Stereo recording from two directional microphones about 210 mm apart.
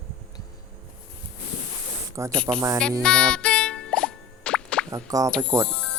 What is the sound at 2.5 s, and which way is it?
Speech, 15° right (ahead or behind).